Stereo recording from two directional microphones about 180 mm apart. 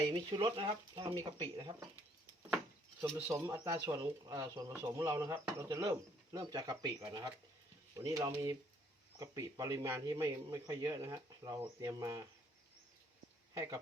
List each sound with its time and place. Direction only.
0.1 s a man's voice: 25° right (ahead or behind)
3.0 s speech: 10° right (ahead or behind)
3.9 s a man's voice: 25° right (ahead or behind)
4.7 s a man's voice: 15° right (ahead or behind)
13.5 s speech: 20° right (ahead or behind)